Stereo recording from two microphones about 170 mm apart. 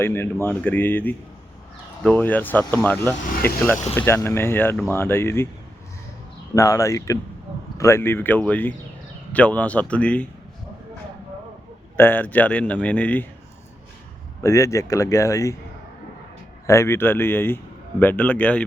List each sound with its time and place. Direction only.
0.0 s speech: 15° left (ahead or behind)
6.5 s speech: 20° left (ahead or behind)
11.9 s speech: 10° left (ahead or behind)
14.4 s speech: 20° left (ahead or behind)
16.6 s speech: 15° left (ahead or behind)